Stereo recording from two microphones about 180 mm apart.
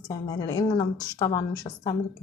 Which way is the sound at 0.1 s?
20° left (ahead or behind).